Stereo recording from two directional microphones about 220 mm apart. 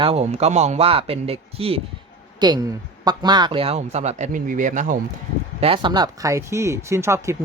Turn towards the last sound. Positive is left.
turn(degrees=-10)  # may be behind; listen again after turning